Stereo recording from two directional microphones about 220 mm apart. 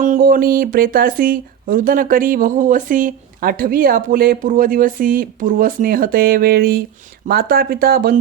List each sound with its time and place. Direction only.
0.0 s speech: 35° right (ahead or behind)